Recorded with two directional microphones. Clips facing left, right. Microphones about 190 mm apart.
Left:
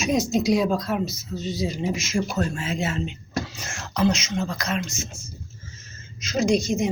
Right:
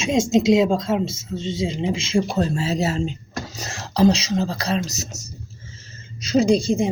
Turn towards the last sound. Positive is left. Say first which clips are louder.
# right 4 dB
turn(degrees=-30)  # may be behind; listen again after turning